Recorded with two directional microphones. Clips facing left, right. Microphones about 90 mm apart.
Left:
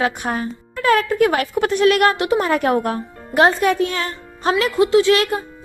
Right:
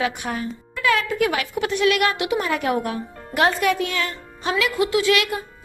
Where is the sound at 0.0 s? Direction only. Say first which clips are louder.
Left 4 dB; 40° left (ahead or behind).